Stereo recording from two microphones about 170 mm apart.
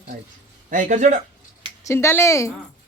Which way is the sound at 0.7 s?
45° right (ahead or behind).